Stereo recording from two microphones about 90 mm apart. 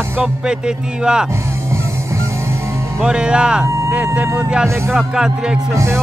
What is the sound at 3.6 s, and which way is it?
Music, 35° right (ahead or behind).